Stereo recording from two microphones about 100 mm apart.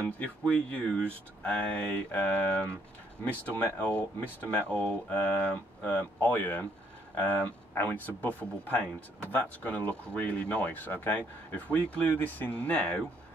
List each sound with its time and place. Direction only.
0.2 s speech: 15° left (ahead or behind)